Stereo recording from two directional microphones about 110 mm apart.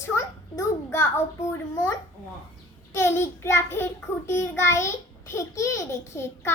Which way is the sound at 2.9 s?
25° left (ahead or behind).